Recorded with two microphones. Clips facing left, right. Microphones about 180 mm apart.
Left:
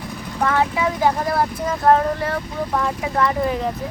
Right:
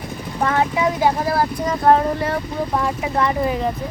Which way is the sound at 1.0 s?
5° right (ahead or behind).